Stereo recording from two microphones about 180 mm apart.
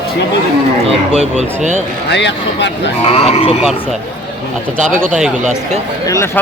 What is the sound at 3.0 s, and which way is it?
Speech, 35° left (ahead or behind).